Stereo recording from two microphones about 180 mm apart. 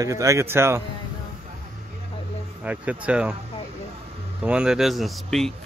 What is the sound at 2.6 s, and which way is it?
Speech, 10° right (ahead or behind).